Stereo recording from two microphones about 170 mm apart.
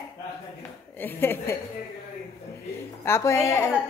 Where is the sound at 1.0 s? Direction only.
15° left (ahead or behind).